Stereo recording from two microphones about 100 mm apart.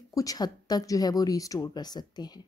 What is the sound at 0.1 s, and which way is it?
Speech, 35° left (ahead or behind).